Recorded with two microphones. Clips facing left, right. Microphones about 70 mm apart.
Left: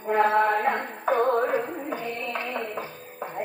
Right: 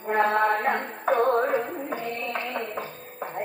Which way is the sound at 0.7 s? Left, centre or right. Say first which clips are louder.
Right 1 dB; right.